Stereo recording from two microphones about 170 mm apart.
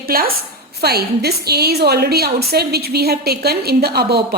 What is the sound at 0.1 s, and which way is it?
A woman's voice, 60° right (ahead or behind).